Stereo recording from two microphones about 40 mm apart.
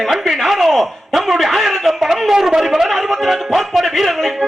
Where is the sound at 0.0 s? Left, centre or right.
Centre.